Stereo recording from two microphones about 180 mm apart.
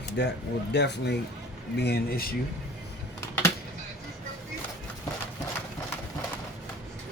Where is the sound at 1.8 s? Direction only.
60° left (ahead or behind).